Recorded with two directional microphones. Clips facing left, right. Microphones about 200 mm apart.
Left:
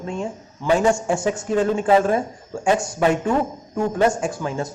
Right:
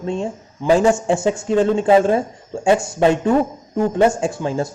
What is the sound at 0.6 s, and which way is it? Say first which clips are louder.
A man's voice: right 3 dB; 20° right (ahead or behind).